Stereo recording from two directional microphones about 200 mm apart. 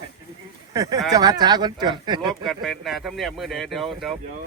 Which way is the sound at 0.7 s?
15° right (ahead or behind).